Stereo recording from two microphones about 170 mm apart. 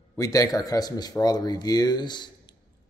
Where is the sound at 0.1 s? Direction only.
20° left (ahead or behind).